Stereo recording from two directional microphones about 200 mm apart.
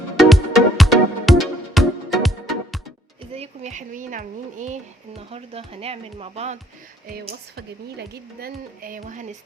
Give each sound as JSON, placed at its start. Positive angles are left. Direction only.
{"t": 0.2, "sound": "music", "side_deg": 0}
{"t": 3.3, "sound": "speech", "side_deg": -30}
{"t": 7.5, "sound": "speech", "side_deg": -55}